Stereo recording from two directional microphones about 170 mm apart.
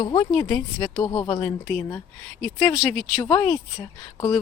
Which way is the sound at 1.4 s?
10° left (ahead or behind).